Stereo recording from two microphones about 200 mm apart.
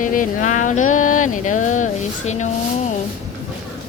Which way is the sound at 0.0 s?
40° left (ahead or behind).